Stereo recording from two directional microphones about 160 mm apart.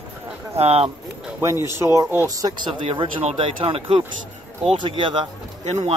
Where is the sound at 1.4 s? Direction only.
15° right (ahead or behind).